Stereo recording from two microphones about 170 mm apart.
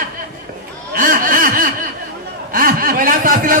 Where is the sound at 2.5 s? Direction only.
55° right (ahead or behind).